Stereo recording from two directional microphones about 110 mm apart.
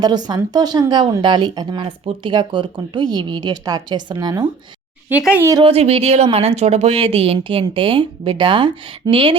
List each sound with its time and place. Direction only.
0.0 s speech: 40° right (ahead or behind)
1.8 s speech: 50° right (ahead or behind)
5.6 s a woman's voice: 65° right (ahead or behind)